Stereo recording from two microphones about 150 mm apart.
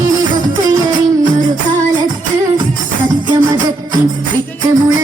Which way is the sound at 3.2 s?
30° right (ahead or behind).